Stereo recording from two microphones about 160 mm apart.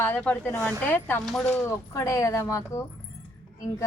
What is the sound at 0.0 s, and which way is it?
A woman's voice, 10° left (ahead or behind).